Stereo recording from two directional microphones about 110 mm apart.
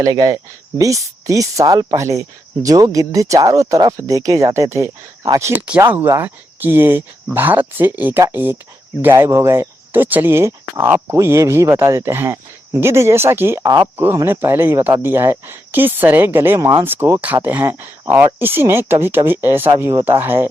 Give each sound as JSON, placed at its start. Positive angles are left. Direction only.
{"t": 0.0, "sound": "speech", "side_deg": -35}
{"t": 5.6, "sound": "speech", "side_deg": -15}
{"t": 16.8, "sound": "speech", "side_deg": -20}